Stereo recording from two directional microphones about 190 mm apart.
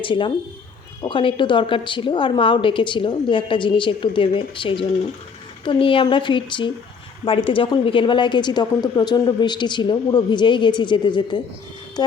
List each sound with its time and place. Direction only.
0.0 s a woman's voice: 25° left (ahead or behind)